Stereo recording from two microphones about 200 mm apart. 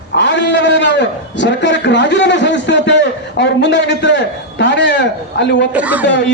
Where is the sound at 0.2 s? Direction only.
60° left (ahead or behind).